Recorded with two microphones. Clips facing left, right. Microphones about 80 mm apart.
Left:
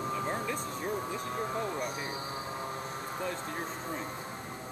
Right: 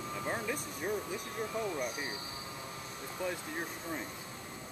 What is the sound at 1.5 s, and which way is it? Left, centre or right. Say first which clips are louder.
Speech: right 1 dB; left.